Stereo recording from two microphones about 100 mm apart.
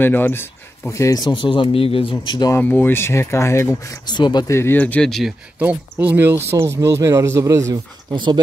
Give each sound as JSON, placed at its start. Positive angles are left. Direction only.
{"t": 0.0, "sound": "speech", "side_deg": 20}
{"t": 1.2, "sound": "speech", "side_deg": 55}
{"t": 2.2, "sound": "speech", "side_deg": 45}
{"t": 2.5, "sound": "speech", "side_deg": 20}
{"t": 4.0, "sound": "speech", "side_deg": 45}
{"t": 4.5, "sound": "speech", "side_deg": 25}
{"t": 5.0, "sound": "speech", "side_deg": 5}
{"t": 5.6, "sound": "speech", "side_deg": -15}
{"t": 8.1, "sound": "speech", "side_deg": -50}